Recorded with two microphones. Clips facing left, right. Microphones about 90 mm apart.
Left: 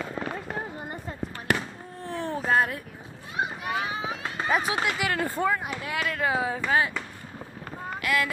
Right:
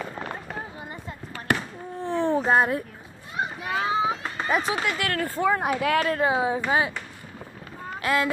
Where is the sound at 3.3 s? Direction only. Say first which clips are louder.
Right 1 dB; 15° left (ahead or behind).